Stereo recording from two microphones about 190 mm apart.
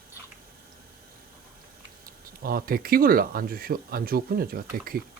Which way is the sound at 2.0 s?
50° right (ahead or behind).